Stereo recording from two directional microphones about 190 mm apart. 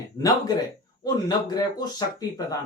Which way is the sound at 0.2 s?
20° left (ahead or behind).